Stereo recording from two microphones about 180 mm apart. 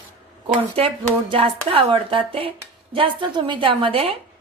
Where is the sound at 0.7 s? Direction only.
30° right (ahead or behind).